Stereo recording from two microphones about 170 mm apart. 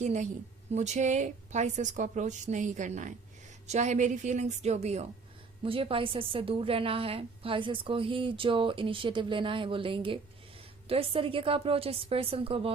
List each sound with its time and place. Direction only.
0.0 s a woman's voice: 45° right (ahead or behind)